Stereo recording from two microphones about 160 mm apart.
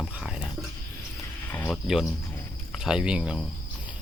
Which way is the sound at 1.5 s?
10° left (ahead or behind).